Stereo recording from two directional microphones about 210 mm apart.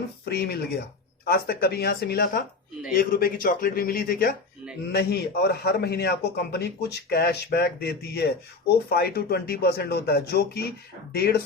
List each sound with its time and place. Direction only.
0.3 s speech: 50° left (ahead or behind)